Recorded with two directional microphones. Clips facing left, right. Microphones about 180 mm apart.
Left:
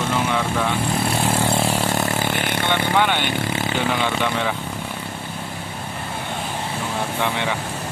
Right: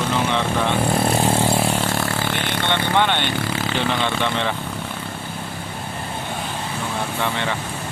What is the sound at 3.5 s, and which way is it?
Vehicle, 20° left (ahead or behind).